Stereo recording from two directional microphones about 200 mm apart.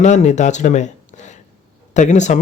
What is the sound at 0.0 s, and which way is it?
Speech, 35° left (ahead or behind).